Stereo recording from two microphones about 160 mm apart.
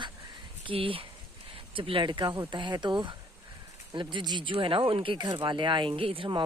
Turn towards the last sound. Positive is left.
turn(degrees=-35)  # may be behind; listen again after turning